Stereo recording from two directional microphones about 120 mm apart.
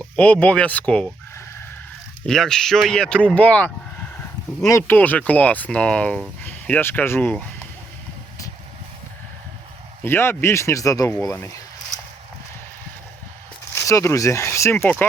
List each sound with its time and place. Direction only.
0.2 s speech: 10° left (ahead or behind)
2.2 s speech: 5° left (ahead or behind)
4.7 s speech: 15° left (ahead or behind)
10.0 s speech: 20° left (ahead or behind)
13.7 s speech: 25° left (ahead or behind)